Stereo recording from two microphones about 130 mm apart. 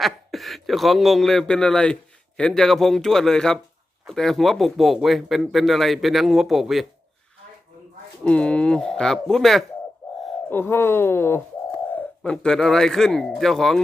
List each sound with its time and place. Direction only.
0.0 s speech: centre (ahead or behind)
8.2 s speech: 10° left (ahead or behind)
10.5 s speech: 15° left (ahead or behind)
11.9 s speech: 5° left (ahead or behind)